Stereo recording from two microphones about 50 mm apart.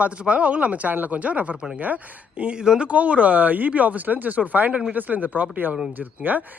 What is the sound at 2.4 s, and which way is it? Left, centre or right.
Speech, centre.